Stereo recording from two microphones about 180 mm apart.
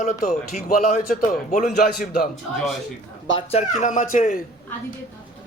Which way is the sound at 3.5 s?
40° left (ahead or behind).